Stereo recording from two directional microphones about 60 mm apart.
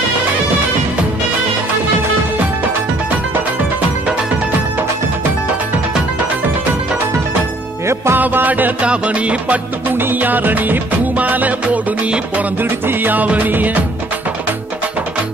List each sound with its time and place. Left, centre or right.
7.8 s music: right
8.2 s music: right
8.8 s music: centre
9.9 s music: right